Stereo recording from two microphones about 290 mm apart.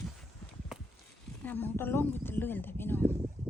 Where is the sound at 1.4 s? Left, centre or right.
Centre.